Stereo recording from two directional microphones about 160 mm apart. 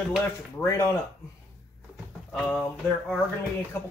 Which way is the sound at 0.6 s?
20° left (ahead or behind).